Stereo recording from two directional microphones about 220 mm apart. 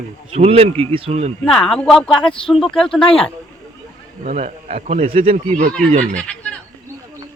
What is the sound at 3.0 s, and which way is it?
Speech, 25° left (ahead or behind).